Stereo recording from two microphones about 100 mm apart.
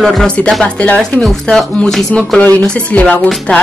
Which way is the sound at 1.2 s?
5° left (ahead or behind).